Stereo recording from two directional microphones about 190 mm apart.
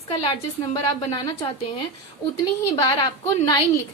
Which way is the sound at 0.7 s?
20° left (ahead or behind).